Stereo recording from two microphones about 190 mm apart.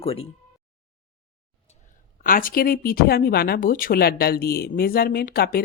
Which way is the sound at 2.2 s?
45° left (ahead or behind).